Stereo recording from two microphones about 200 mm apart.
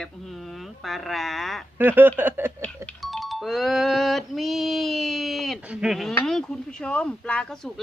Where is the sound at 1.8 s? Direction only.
10° right (ahead or behind).